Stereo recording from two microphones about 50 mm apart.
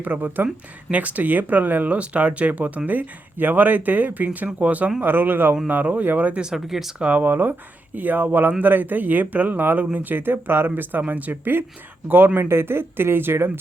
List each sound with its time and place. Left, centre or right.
0.0 s speech: right
4.9 s speech: right
6.4 s speech: centre
7.0 s speech: right
11.0 s speech: right